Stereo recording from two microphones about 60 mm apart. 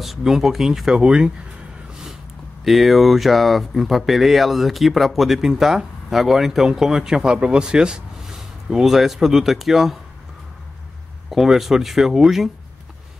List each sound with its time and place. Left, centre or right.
0.0 s speech: centre
2.6 s speech: centre
11.2 s speech: centre